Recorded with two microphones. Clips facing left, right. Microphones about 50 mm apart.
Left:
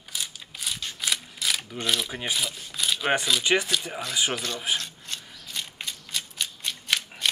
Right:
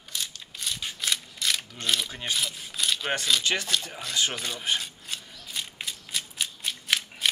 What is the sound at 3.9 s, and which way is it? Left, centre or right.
Speech, centre.